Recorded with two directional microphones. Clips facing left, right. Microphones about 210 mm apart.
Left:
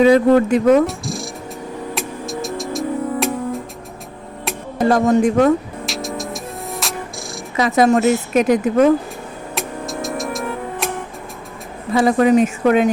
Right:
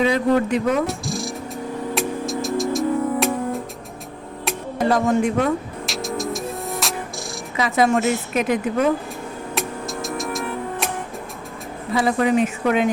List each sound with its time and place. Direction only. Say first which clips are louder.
0.0 s a woman's voice: left 7 dB; 45° left (ahead or behind)
0.9 s cat: even; centre (ahead or behind)
2.0 s music: right 3 dB; centre (ahead or behind)
4.9 s speech: left 5 dB; 45° left (ahead or behind)
5.8 s music: even; centre (ahead or behind)
7.5 s a woman's voice: left 4 dB; 45° left (ahead or behind)
9.6 s music: left 3 dB; centre (ahead or behind)
11.9 s a woman's voice: left 5 dB; 45° left (ahead or behind)